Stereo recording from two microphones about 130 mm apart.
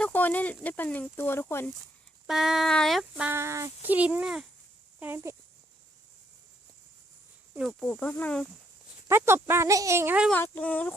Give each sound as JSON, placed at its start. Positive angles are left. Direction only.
{"t": 0.0, "sound": "speech", "side_deg": 15}
{"t": 2.2, "sound": "speech", "side_deg": -5}
{"t": 3.2, "sound": "speech", "side_deg": -20}
{"t": 3.9, "sound": "a child's voice", "side_deg": -10}
{"t": 4.9, "sound": "speech", "side_deg": -20}
{"t": 7.8, "sound": "speech", "side_deg": 10}
{"t": 9.0, "sound": "speech", "side_deg": -20}
{"t": 10.3, "sound": "speech", "side_deg": 15}